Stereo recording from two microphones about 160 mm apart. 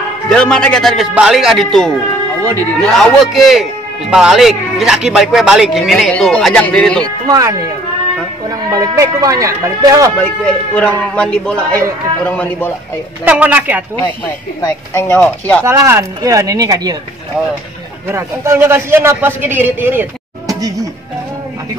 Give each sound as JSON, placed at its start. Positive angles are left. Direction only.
{"t": 0.3, "sound": "speech", "side_deg": 5}
{"t": 7.2, "sound": "speech", "side_deg": -20}
{"t": 10.1, "sound": "speech", "side_deg": 10}
{"t": 13.2, "sound": "a man's voice", "side_deg": -10}
{"t": 14.6, "sound": "speech", "side_deg": 15}
{"t": 15.6, "sound": "speech", "side_deg": -15}
{"t": 18.0, "sound": "a man's voice", "side_deg": -15}